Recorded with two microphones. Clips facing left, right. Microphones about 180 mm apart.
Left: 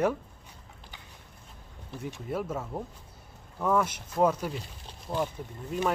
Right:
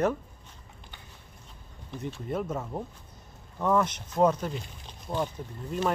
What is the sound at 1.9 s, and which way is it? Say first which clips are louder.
Speech: right 1 dB; 5° left (ahead or behind).